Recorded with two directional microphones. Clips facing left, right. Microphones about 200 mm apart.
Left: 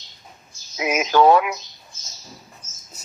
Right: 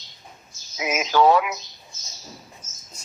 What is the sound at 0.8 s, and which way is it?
Speech, 55° left (ahead or behind).